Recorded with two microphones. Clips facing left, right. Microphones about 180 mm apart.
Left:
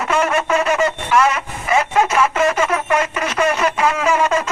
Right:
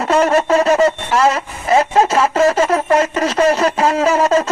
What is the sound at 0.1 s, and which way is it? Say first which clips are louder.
Speech: right 5 dB; 30° right (ahead or behind).